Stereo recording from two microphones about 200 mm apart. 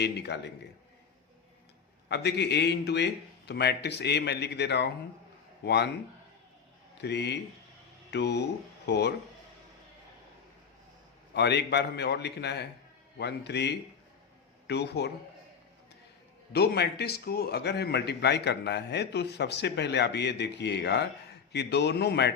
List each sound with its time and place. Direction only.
0.0 s a man's voice: 55° left (ahead or behind)
2.0 s a man's voice: 55° left (ahead or behind)
7.0 s a man's voice: 60° left (ahead or behind)
11.3 s a man's voice: 55° left (ahead or behind)
16.5 s a man's voice: 55° left (ahead or behind)